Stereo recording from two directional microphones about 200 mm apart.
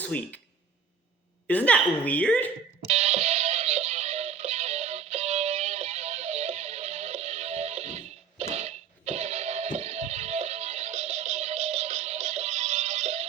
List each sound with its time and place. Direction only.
0.0 s speech: 5° left (ahead or behind)
1.5 s a woman's voice: 5° left (ahead or behind)
2.8 s music: 30° right (ahead or behind)